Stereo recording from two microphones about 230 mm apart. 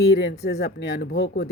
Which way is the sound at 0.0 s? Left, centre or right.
Left.